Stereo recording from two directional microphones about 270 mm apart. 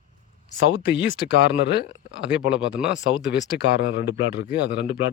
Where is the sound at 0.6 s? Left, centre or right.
Left.